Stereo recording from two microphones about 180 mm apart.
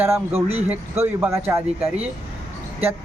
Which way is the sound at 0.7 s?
10° right (ahead or behind).